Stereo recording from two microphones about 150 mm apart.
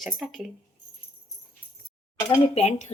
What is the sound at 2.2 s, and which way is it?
Speech, 45° left (ahead or behind).